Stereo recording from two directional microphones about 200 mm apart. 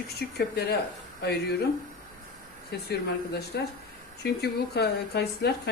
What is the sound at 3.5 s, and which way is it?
Speech, 60° left (ahead or behind).